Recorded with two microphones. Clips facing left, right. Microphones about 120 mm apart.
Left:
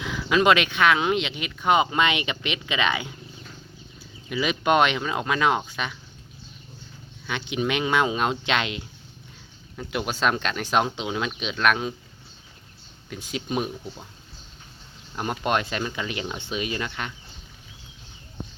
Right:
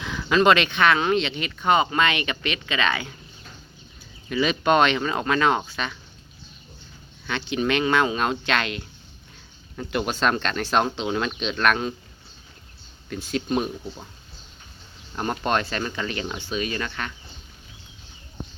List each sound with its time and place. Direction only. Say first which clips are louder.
0.0 s speech: right 1 dB; 5° left (ahead or behind)
4.3 s speech: right 2 dB; 10° left (ahead or behind)
7.3 s speech: right 2 dB; 10° left (ahead or behind)
9.7 s speech: right 3 dB; 5° left (ahead or behind)
13.1 s speech: right 5 dB; 10° left (ahead or behind)
15.1 s speech: right 1 dB; 5° left (ahead or behind)